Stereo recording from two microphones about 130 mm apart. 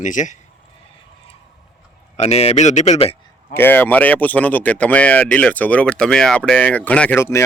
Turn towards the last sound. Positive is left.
turn(degrees=20)  # may be behind; listen again after turning